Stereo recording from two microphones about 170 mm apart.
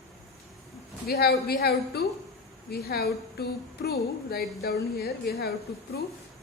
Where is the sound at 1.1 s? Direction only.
70° left (ahead or behind).